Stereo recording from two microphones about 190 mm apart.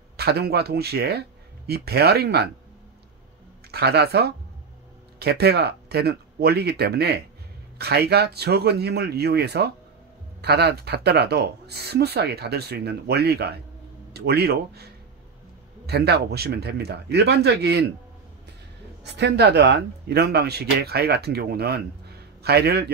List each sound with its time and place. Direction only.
0.2 s speech: 55° right (ahead or behind)
3.7 s speech: 55° right (ahead or behind)
15.9 s speech: 60° right (ahead or behind)
19.1 s speech: 65° right (ahead or behind)